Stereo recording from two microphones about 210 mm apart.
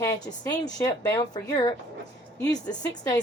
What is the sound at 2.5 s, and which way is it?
Speech, 20° left (ahead or behind).